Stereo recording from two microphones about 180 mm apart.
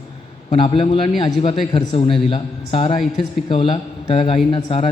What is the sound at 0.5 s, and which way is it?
A man's voice, 30° left (ahead or behind).